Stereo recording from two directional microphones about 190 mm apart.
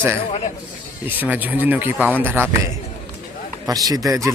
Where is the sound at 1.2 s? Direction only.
10° right (ahead or behind).